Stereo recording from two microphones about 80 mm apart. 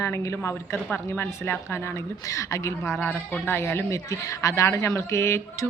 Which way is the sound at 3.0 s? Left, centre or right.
Left.